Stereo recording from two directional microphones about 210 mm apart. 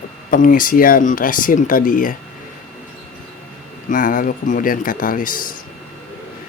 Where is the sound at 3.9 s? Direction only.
40° left (ahead or behind).